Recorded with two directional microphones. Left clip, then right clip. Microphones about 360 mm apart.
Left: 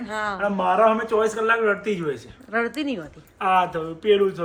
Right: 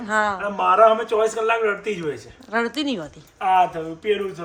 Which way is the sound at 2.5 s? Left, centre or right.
Centre.